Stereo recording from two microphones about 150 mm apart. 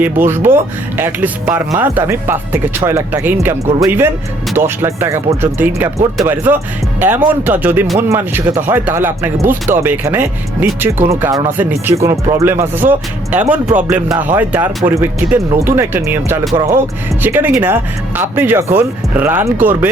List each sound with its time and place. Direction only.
0.0 s speech: 15° right (ahead or behind)